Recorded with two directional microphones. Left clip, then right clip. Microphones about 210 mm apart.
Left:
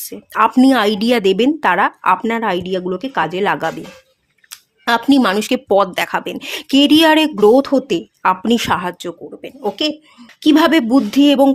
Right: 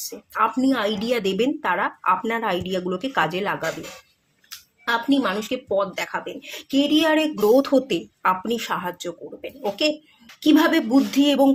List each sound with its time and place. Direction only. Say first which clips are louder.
0.1 s speech: left 8 dB; 35° left (ahead or behind)
3.4 s speech: left 8 dB; 40° left (ahead or behind)
7.3 s speech: left 6 dB; 30° left (ahead or behind)